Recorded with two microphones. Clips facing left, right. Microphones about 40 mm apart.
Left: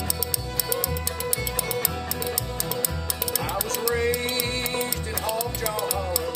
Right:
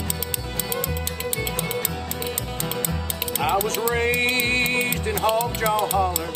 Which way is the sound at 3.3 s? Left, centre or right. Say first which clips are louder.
Right 8 dB; right.